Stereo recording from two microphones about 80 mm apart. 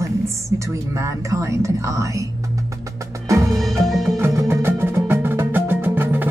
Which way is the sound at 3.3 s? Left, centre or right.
Right.